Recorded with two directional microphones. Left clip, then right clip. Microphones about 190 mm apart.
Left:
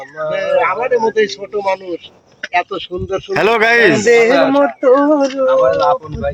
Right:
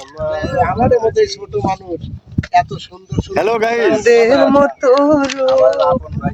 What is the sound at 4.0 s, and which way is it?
Male singing, 30° right (ahead or behind).